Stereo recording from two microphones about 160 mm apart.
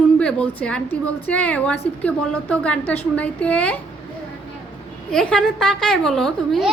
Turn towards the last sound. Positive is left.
turn(degrees=0)  # may be behind; listen again after turning